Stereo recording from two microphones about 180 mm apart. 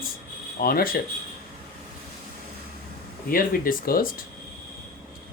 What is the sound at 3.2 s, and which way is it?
Speech, 55° left (ahead or behind).